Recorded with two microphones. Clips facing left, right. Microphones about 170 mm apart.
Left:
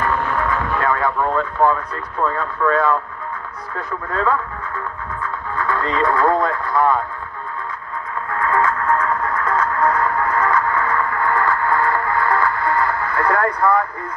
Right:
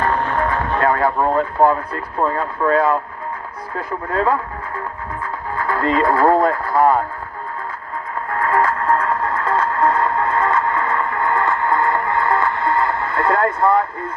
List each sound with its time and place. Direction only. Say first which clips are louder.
0.0 s speech: right 2 dB; 35° right (ahead or behind)
8.3 s music: right 1 dB; 30° right (ahead or behind)